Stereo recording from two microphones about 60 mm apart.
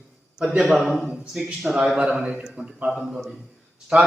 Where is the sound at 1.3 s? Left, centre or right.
Centre.